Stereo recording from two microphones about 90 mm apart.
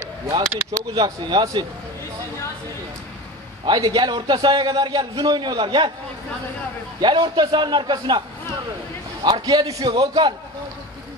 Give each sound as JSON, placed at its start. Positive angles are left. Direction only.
{"t": 0.9, "sound": "a man's voice", "side_deg": -45}
{"t": 3.6, "sound": "a man's voice", "side_deg": -55}
{"t": 7.0, "sound": "a man's voice", "side_deg": -60}
{"t": 9.2, "sound": "a man's voice", "side_deg": -50}